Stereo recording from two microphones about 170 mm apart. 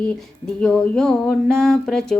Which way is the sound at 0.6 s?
5° left (ahead or behind).